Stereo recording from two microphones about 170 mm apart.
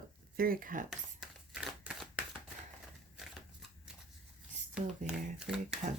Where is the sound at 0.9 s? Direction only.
Centre (ahead or behind).